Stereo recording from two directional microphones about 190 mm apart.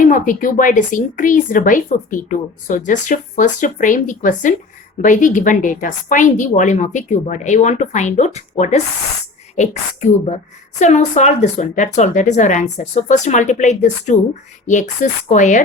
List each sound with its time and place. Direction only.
0.0 s a woman's voice: 45° left (ahead or behind)